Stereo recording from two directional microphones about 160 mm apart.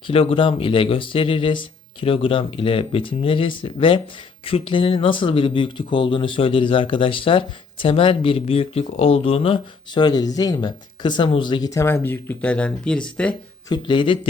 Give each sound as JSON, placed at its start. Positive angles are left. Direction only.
{"t": 0.1, "sound": "speech", "side_deg": 35}
{"t": 13.7, "sound": "speech", "side_deg": 30}